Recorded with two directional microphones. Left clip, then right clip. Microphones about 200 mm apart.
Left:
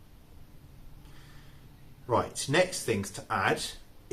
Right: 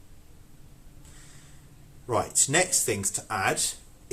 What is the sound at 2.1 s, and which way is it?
Speech, 45° right (ahead or behind).